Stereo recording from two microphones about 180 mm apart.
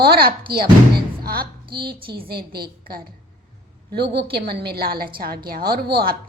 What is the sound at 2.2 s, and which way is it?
Speech, 60° right (ahead or behind).